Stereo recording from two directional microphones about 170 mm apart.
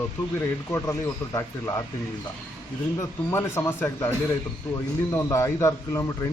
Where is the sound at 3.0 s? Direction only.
15° left (ahead or behind).